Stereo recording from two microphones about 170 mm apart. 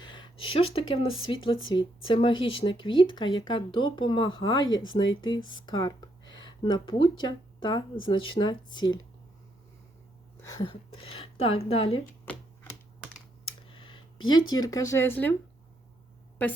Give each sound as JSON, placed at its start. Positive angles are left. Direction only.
{"t": 0.0, "sound": "speech", "side_deg": 25}
{"t": 10.4, "sound": "speech", "side_deg": 20}
{"t": 12.2, "sound": "typewriter", "side_deg": 15}
{"t": 13.4, "sound": "a sound", "side_deg": 30}